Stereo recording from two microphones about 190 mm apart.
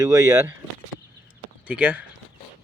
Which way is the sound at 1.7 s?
5° right (ahead or behind).